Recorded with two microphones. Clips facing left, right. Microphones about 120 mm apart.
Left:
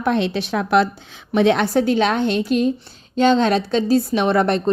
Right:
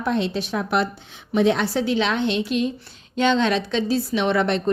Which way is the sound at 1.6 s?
50° left (ahead or behind).